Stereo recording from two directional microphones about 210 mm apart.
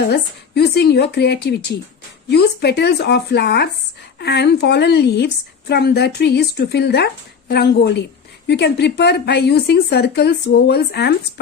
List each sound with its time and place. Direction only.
0.0 s a woman's voice: 50° left (ahead or behind)